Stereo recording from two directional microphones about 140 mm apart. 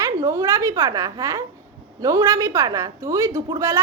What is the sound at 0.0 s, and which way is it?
A woman's voice, 25° right (ahead or behind).